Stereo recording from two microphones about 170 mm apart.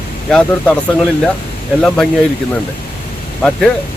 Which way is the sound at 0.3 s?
5° left (ahead or behind).